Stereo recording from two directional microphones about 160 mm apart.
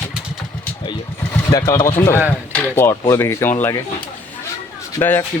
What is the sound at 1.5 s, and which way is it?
Speech, 20° left (ahead or behind).